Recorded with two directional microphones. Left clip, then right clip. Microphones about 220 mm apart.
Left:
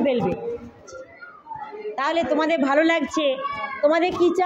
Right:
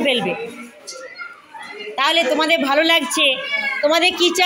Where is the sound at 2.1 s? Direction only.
5° right (ahead or behind).